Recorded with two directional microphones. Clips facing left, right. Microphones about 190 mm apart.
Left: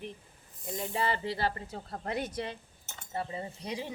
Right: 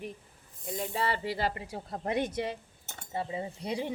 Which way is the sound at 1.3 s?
15° right (ahead or behind).